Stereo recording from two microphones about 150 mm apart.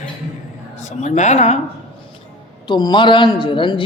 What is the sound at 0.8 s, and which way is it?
Speech, 50° left (ahead or behind).